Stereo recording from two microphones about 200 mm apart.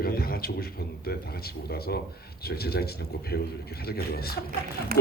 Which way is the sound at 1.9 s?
55° left (ahead or behind).